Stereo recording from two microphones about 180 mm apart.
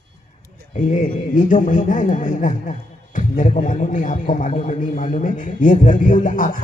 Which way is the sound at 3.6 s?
45° left (ahead or behind).